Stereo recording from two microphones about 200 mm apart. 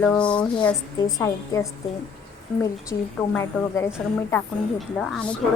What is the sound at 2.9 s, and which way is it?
Speech, 15° left (ahead or behind).